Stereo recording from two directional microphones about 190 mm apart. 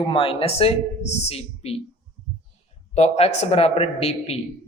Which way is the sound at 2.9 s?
35° left (ahead or behind).